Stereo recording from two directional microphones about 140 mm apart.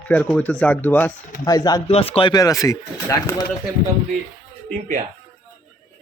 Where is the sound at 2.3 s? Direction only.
25° left (ahead or behind).